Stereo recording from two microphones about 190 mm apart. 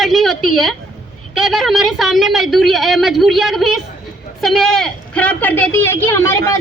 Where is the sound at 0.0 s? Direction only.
Centre (ahead or behind).